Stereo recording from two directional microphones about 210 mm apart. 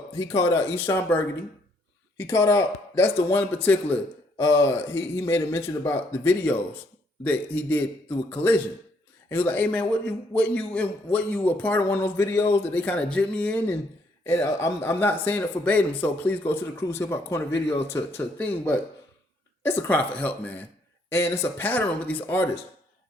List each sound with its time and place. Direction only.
0.1 s speech: 25° left (ahead or behind)
0.3 s speech: 10° left (ahead or behind)
19.9 s speech: 5° left (ahead or behind)